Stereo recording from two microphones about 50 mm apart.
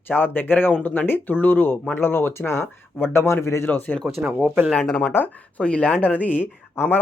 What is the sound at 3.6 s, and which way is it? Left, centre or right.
Speech, left.